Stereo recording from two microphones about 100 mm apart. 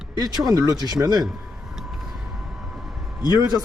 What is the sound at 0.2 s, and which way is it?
Speech, 40° right (ahead or behind).